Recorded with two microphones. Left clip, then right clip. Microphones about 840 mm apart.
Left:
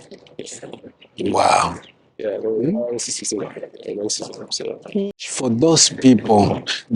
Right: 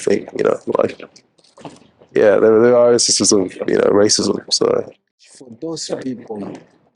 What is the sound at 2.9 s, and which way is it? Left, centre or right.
Speech, right.